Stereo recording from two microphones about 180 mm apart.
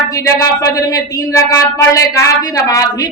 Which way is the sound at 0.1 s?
20° left (ahead or behind).